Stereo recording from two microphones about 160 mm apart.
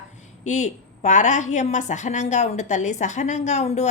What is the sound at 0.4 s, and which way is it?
A woman's voice, 50° left (ahead or behind).